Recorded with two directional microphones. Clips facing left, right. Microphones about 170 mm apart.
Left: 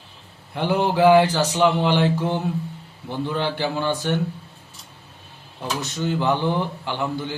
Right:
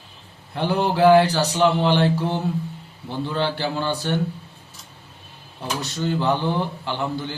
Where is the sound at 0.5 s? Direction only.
15° left (ahead or behind).